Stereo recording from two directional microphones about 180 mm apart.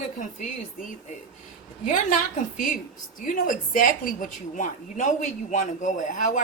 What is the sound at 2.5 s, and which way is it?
A woman's voice, 45° left (ahead or behind).